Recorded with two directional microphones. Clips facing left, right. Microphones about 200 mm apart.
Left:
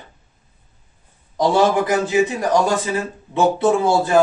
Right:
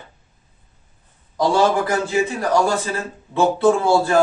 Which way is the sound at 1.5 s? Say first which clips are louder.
Left 2 dB; 20° left (ahead or behind).